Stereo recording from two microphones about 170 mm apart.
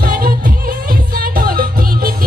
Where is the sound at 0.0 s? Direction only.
60° right (ahead or behind).